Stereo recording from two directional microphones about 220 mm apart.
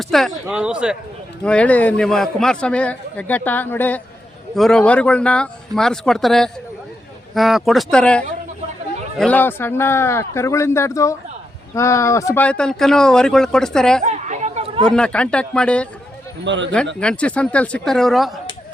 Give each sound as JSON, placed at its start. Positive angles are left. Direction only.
{"t": 0.0, "sound": "a man's voice", "side_deg": 0}
{"t": 14.0, "sound": "a sound", "side_deg": -30}
{"t": 14.8, "sound": "a man's voice", "side_deg": 5}
{"t": 16.4, "sound": "a man's voice", "side_deg": -55}
{"t": 17.0, "sound": "a man's voice", "side_deg": 5}